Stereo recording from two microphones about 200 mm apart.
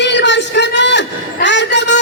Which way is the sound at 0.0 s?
60° left (ahead or behind).